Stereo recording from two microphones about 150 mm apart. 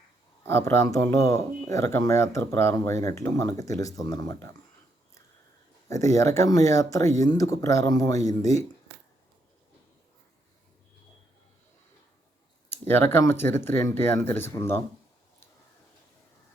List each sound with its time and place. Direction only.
0.4 s speech: 15° left (ahead or behind)
5.9 s speech: 20° left (ahead or behind)
12.9 s speech: 15° left (ahead or behind)